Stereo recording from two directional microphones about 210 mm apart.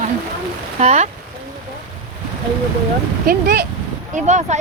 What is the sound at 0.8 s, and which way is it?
Speech, 30° right (ahead or behind).